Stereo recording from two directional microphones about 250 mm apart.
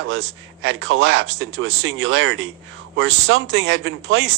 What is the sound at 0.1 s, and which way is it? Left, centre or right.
Speech, right.